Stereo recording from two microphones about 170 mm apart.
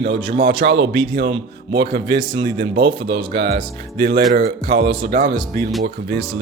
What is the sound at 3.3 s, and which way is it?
Speech, 70° right (ahead or behind).